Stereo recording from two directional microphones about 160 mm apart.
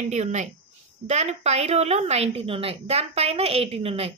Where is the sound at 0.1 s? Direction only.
45° right (ahead or behind).